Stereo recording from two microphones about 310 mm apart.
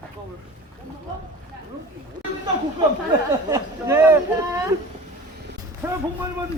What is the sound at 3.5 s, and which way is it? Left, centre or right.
Speech, centre.